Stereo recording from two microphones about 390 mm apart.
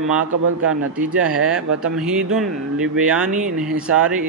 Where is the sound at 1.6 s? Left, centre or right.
Right.